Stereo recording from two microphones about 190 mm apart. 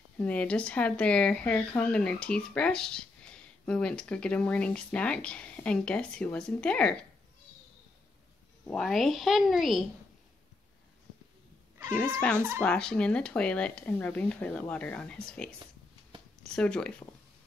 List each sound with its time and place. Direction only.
0.2 s a woman's voice: 5° left (ahead or behind)
8.6 s a woman's voice: centre (ahead or behind)
12.2 s a woman's voice: 5° left (ahead or behind)